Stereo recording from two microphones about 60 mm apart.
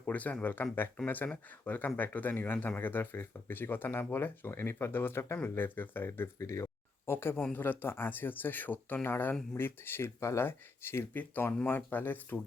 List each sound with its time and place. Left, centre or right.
0.0 s speech: left
6.1 s speech: left
7.1 s speech: left